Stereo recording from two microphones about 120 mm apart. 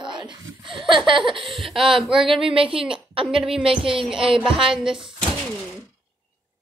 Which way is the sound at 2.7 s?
5° right (ahead or behind).